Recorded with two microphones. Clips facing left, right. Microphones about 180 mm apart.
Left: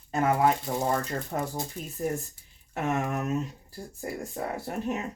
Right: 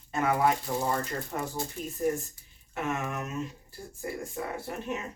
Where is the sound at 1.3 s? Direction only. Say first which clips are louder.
Left 3 dB; 40° left (ahead or behind).